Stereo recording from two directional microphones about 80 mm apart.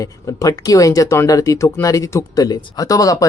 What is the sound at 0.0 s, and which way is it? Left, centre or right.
Speech, left.